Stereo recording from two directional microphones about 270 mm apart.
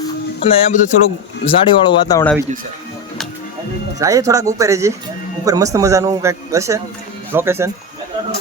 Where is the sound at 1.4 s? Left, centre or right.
Centre.